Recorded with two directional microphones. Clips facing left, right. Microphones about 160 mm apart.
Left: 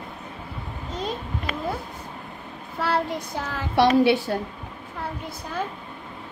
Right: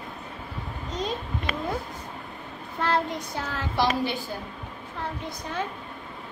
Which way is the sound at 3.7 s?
70° left (ahead or behind).